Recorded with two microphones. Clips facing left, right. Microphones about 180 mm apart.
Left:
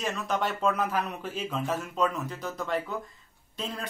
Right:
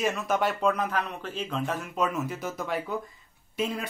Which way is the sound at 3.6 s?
15° right (ahead or behind).